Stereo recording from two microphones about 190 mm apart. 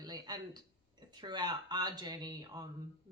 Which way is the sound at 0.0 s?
20° right (ahead or behind).